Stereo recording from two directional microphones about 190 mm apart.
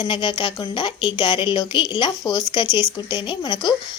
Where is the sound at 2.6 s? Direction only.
15° right (ahead or behind).